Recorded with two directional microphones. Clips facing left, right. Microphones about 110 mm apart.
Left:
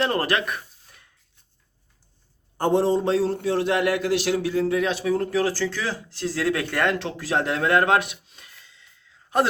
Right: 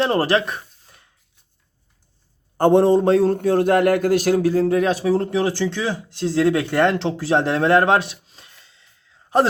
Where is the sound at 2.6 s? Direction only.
60° right (ahead or behind).